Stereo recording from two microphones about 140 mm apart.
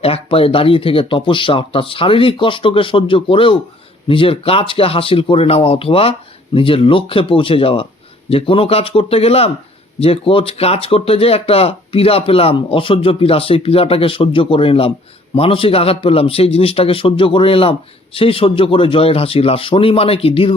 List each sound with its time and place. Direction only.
0.0 s a man's voice: 45° left (ahead or behind)